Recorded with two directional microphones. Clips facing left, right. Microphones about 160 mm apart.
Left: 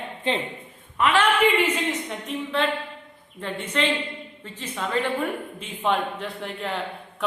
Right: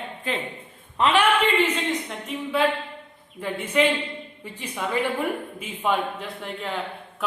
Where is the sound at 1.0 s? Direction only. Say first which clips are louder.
Right 1 dB; 25° right (ahead or behind).